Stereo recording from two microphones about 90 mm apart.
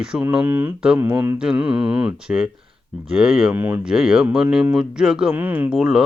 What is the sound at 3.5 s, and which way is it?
Speech, 20° right (ahead or behind).